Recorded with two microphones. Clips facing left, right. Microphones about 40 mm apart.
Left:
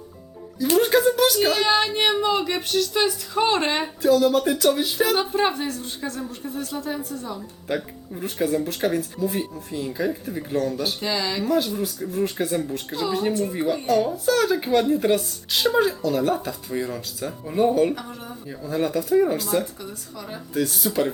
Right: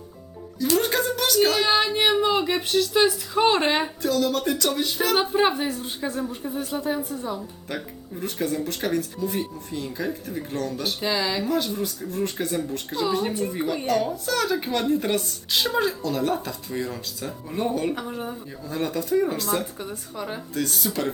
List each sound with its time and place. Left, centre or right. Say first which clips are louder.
0.8 s speech: left 6 dB; centre
4.0 s speech: left 8 dB; centre
5.1 s speech: right 1 dB; centre
8.1 s speech: left 3 dB; centre
11.0 s speech: right 2 dB; centre
18.1 s speech: right 5 dB; centre
18.6 s speech: left 4 dB; centre
19.8 s speech: right 3 dB; right
20.5 s speech: left 5 dB; centre